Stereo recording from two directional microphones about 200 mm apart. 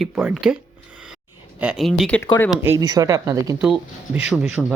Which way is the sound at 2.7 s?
15° right (ahead or behind).